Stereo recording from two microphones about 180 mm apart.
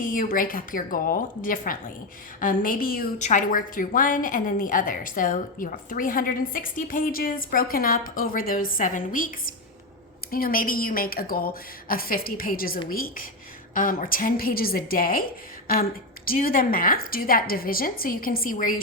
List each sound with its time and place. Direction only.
0.0 s a woman's voice: 50° left (ahead or behind)
3.2 s a woman's voice: 40° left (ahead or behind)